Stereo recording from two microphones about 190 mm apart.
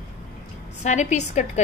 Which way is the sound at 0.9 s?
40° left (ahead or behind).